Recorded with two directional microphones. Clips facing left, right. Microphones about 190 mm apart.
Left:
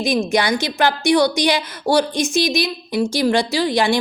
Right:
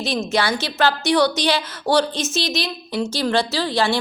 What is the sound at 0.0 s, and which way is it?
A woman's voice, 15° left (ahead or behind).